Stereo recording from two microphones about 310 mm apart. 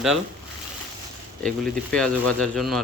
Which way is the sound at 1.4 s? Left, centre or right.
Centre.